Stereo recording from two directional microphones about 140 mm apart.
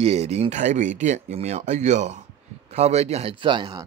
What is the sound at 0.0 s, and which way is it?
Speech, 45° right (ahead or behind).